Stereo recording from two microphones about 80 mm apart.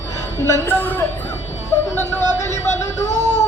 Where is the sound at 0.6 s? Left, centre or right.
Left.